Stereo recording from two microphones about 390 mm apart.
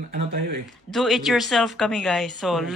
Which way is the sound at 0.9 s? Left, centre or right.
Centre.